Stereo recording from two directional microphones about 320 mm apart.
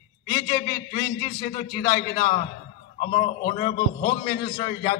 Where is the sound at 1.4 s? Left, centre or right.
Left.